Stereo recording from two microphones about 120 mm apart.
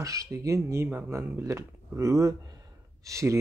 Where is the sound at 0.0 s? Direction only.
25° right (ahead or behind).